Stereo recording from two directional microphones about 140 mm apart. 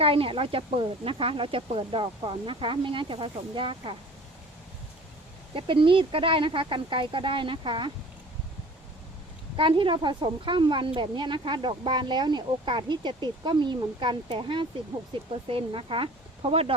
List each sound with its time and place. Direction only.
0.0 s a woman's voice: 40° right (ahead or behind)
5.5 s a woman's voice: 40° right (ahead or behind)
9.6 s a woman's voice: 35° right (ahead or behind)